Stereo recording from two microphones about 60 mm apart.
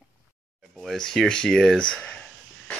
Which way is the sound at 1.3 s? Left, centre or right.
Centre.